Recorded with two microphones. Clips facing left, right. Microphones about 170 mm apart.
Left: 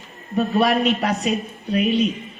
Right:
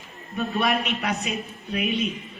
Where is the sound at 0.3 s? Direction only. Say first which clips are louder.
Left 6 dB; 40° left (ahead or behind).